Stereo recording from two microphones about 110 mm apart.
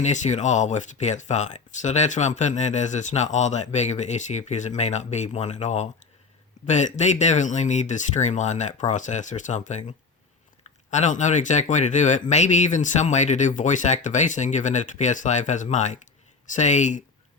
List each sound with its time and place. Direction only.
0.0 s speech: 90° left
10.9 s speech: 90° left